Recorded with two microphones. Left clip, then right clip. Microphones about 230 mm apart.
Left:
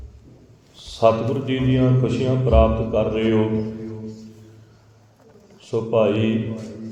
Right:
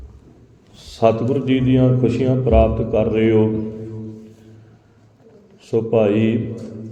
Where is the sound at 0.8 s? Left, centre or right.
Centre.